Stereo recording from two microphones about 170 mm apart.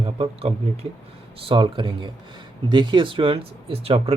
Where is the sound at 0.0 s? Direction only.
35° right (ahead or behind).